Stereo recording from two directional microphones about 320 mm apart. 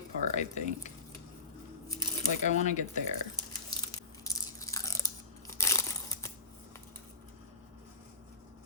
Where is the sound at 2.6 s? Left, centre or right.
Left.